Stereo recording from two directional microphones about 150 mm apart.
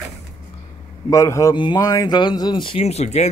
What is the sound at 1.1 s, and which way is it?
A man's voice, 20° left (ahead or behind).